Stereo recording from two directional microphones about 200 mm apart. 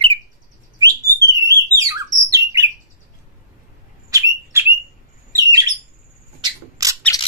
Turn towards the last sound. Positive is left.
turn(degrees=-15)  # may be behind; listen again after turning